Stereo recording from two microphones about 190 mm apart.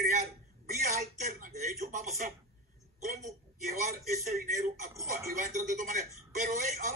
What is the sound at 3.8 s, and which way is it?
Speech, 40° right (ahead or behind).